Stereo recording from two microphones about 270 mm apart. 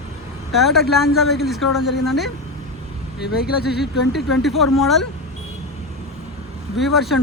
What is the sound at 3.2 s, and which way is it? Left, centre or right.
Speech, left.